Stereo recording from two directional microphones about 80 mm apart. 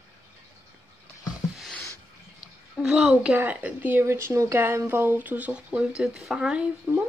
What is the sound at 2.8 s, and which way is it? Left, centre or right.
Speech, centre.